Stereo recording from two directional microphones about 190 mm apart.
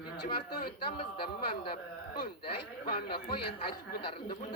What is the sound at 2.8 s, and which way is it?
Speech, 55° left (ahead or behind).